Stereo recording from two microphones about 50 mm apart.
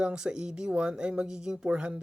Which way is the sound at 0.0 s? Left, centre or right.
Centre.